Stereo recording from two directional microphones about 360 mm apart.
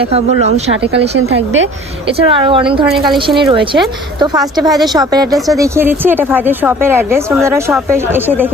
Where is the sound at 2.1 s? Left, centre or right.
Centre.